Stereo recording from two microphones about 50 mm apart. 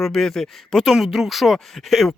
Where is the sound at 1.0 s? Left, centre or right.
Centre.